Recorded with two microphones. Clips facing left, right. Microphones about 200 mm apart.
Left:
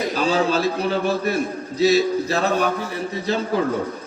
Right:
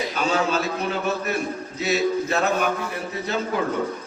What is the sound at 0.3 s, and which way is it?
A man's voice, 35° left (ahead or behind).